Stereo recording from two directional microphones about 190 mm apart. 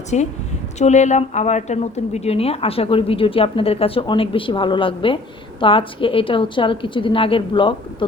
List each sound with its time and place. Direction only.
0.1 s a woman's voice: 35° left (ahead or behind)